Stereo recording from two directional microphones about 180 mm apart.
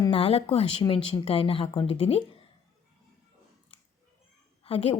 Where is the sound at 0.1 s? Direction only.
30° left (ahead or behind).